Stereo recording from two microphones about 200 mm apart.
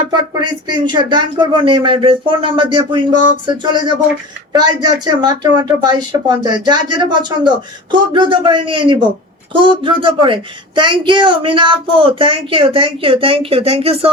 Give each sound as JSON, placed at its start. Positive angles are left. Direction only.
{"t": 0.1, "sound": "a woman's voice", "side_deg": -20}